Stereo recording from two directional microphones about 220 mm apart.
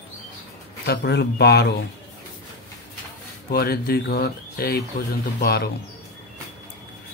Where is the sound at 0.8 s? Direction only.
50° left (ahead or behind).